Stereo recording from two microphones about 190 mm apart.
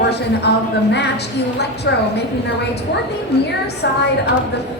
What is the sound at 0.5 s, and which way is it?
A woman's voice, 65° left (ahead or behind).